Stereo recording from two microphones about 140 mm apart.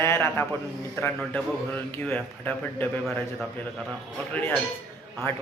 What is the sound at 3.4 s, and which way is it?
Speech, 5° left (ahead or behind).